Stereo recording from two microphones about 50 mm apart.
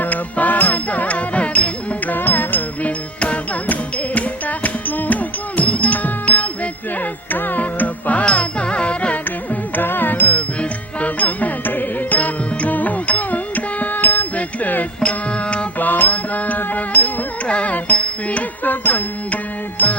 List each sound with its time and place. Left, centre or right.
0.0 s music: left
3.2 s music: left
9.7 s music: left